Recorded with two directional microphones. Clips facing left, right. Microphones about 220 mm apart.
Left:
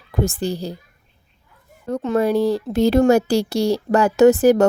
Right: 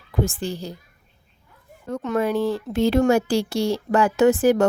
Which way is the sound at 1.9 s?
30° left (ahead or behind).